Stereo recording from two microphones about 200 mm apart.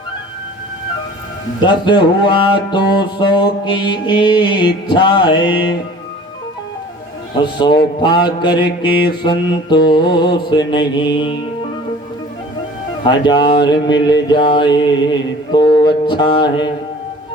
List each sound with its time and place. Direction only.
1.6 s music: 25° left (ahead or behind)
7.4 s music: 25° left (ahead or behind)
13.1 s music: 25° left (ahead or behind)